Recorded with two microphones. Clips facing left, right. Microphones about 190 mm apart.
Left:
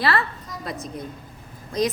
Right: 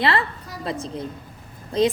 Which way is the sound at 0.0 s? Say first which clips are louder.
Right 1 dB; 25° right (ahead or behind).